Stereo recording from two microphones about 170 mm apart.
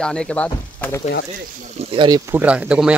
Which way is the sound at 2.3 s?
10° right (ahead or behind).